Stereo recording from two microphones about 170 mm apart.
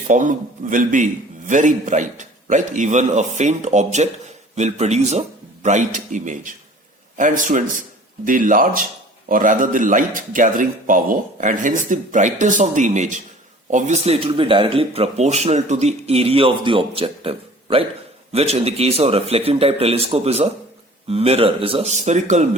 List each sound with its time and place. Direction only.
0.1 s a man's voice: 50° right (ahead or behind)